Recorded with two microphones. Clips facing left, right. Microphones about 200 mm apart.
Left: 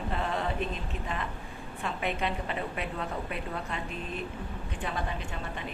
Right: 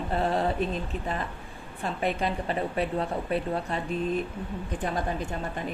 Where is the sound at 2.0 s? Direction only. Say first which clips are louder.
Right 4 dB; 40° right (ahead or behind).